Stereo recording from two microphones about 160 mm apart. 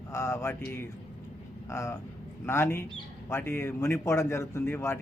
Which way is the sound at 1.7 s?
15° left (ahead or behind).